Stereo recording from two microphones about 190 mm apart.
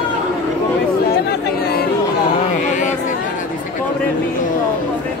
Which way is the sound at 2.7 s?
40° left (ahead or behind).